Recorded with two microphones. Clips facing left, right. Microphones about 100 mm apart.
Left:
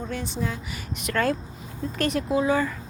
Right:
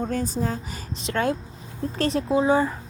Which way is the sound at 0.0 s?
40° right (ahead or behind).